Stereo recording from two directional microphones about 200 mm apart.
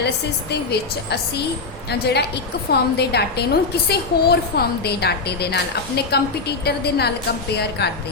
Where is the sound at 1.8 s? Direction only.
55° left (ahead or behind).